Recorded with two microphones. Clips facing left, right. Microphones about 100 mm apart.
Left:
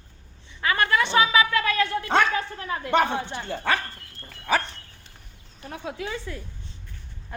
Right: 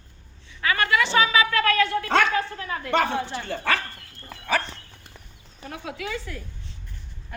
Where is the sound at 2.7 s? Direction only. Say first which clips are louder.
Left 1 dB; 20° left (ahead or behind).